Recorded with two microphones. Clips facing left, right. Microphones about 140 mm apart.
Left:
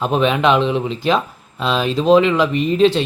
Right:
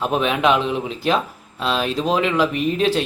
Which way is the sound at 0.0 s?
5° right (ahead or behind).